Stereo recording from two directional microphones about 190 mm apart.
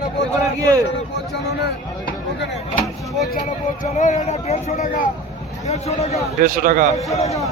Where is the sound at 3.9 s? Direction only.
40° left (ahead or behind).